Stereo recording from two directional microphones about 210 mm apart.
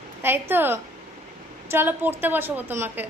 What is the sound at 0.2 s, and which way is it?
A woman's voice, 10° right (ahead or behind).